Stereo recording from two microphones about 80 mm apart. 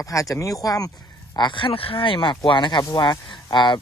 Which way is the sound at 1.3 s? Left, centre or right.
Left.